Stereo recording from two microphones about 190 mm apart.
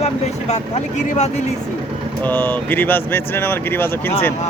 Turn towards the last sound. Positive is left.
turn(degrees=10)  # may be behind; listen again after turning